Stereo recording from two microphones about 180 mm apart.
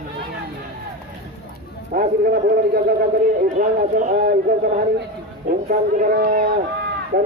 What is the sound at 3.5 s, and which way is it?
Speech, 45° right (ahead or behind).